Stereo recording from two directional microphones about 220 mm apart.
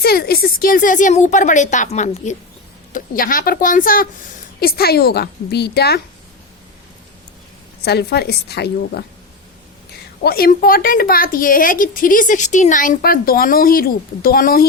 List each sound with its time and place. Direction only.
0.0 s a woman's voice: 45° left (ahead or behind)
7.9 s a woman's voice: 45° left (ahead or behind)
10.2 s speech: 45° left (ahead or behind)